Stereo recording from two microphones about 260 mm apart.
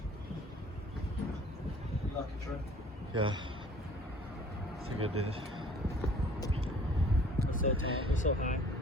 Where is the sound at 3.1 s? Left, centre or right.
Centre.